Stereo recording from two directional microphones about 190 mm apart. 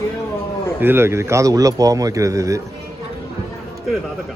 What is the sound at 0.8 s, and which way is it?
Speech, 10° right (ahead or behind).